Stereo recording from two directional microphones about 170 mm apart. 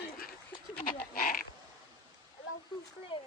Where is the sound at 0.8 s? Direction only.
60° left (ahead or behind).